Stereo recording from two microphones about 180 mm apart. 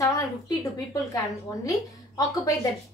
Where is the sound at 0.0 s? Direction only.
20° left (ahead or behind).